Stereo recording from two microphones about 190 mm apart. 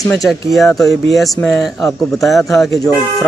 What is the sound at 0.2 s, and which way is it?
Speech, centre (ahead or behind).